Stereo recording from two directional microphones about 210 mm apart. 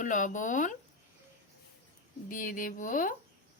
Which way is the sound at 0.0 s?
40° left (ahead or behind).